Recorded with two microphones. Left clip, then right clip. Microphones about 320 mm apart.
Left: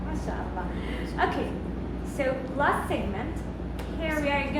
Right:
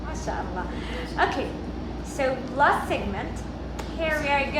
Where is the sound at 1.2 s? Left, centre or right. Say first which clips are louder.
Right 3 dB; right.